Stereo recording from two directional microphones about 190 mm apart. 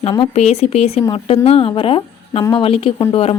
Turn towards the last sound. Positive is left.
turn(degrees=30)  # may be behind; listen again after turning